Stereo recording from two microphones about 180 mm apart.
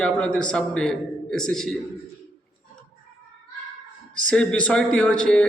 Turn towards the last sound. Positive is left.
turn(degrees=5)  # may be behind; listen again after turning